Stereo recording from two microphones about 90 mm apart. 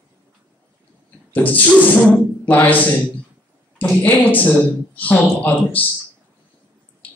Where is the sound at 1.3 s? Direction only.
20° left (ahead or behind).